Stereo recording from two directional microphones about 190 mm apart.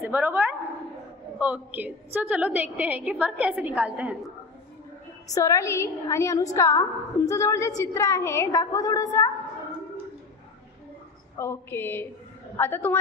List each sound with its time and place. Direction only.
0.0 s a sound: 10° right (ahead or behind)
1.4 s a woman's voice: 5° right (ahead or behind)
5.3 s a woman's voice: 15° left (ahead or behind)
11.3 s a woman's voice: 10° left (ahead or behind)